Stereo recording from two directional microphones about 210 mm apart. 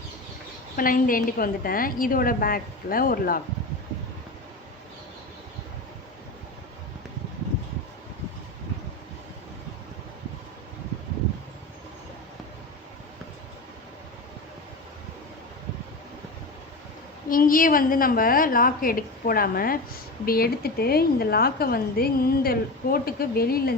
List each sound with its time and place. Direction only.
0.8 s a woman's voice: 40° left (ahead or behind)
17.2 s a woman's voice: 40° left (ahead or behind)